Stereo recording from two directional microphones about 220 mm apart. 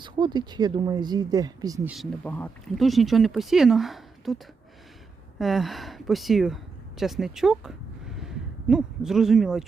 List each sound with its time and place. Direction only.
0.0 s speech: 20° right (ahead or behind)
1.9 s speech: 5° left (ahead or behind)
5.4 s speech: centre (ahead or behind)